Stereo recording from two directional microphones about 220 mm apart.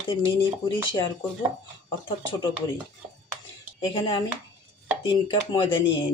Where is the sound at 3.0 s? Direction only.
25° right (ahead or behind).